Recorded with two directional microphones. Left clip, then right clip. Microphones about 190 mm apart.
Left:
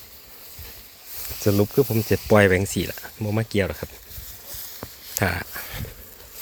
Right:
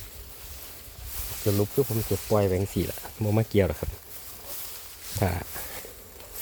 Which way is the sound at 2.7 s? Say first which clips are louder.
Left 3 dB; 5° right (ahead or behind).